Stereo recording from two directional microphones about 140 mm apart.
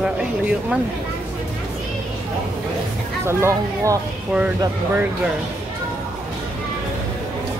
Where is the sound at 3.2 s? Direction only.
20° right (ahead or behind).